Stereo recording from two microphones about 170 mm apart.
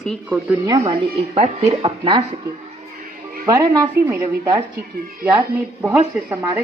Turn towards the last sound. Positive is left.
turn(degrees=-10)  # may be behind; listen again after turning